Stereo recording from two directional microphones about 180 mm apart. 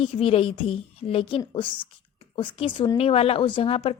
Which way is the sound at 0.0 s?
30° left (ahead or behind).